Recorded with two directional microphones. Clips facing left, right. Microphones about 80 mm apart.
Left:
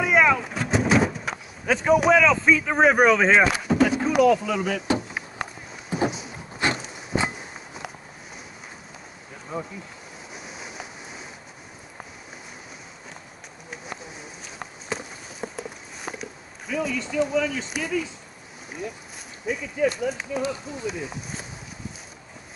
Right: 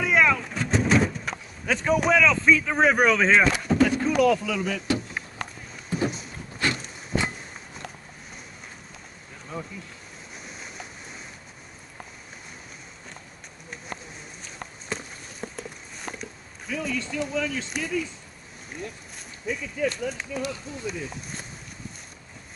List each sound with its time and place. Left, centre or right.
0.0 s vehicle: centre
5.4 s run: centre
6.6 s a sound: left
9.5 s speech: centre
10.3 s ocean: centre
14.9 s walk: centre
19.4 s speech: centre